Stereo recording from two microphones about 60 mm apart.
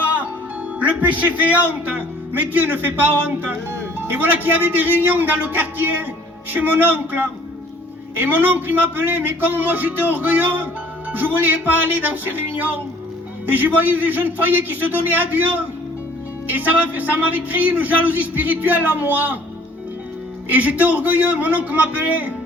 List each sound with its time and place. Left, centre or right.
1.9 s a man's voice: right
20.5 s a man's voice: right